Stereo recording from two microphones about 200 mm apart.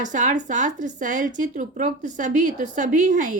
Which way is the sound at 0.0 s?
40° right (ahead or behind).